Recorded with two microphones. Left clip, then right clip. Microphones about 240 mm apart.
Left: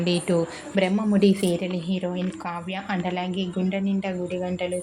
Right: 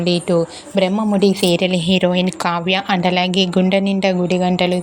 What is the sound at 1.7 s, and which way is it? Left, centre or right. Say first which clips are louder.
Speech: right 13 dB; right.